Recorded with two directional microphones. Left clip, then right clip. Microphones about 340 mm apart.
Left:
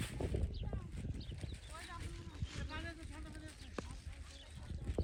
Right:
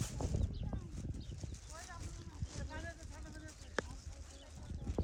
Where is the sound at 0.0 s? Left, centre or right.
Centre.